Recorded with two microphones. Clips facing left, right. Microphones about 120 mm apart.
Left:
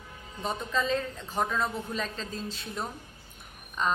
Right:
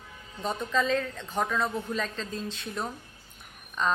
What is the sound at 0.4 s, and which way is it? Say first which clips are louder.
A woman's voice: right 2 dB; centre (ahead or behind).